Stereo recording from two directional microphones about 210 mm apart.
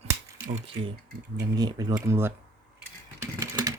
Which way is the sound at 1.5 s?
20° right (ahead or behind).